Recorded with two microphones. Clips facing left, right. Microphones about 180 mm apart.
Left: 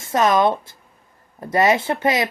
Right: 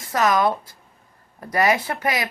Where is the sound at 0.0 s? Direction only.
25° left (ahead or behind).